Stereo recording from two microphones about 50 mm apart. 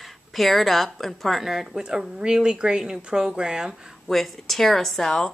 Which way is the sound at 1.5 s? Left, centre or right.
Centre.